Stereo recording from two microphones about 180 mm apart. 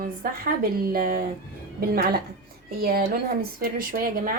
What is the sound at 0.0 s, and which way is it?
A woman's voice, 55° right (ahead or behind).